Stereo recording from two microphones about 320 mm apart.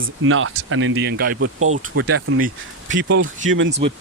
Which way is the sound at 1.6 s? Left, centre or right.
Right.